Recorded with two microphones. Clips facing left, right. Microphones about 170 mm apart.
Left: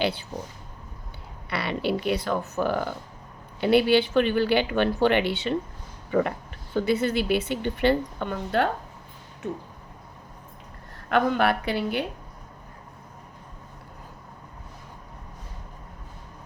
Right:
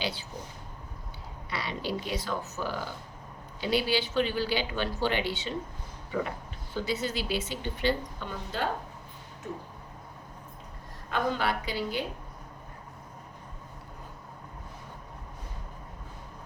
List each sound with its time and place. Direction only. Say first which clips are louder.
0.0 s speech: left 8 dB; 60° left (ahead or behind)
1.5 s speech: left 7 dB; 65° left (ahead or behind)
11.1 s speech: left 7 dB; 60° left (ahead or behind)